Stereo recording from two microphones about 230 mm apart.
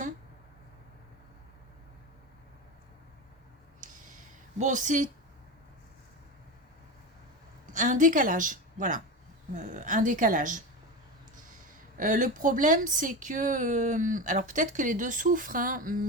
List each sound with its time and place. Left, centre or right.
4.5 s speech: right
7.7 s a woman's voice: right
11.9 s speech: right